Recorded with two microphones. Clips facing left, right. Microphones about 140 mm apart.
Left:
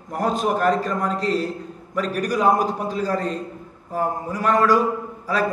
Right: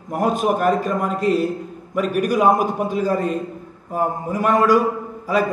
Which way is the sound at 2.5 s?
50° right (ahead or behind).